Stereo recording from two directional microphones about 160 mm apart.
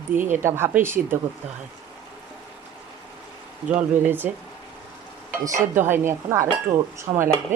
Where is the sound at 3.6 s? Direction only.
10° right (ahead or behind).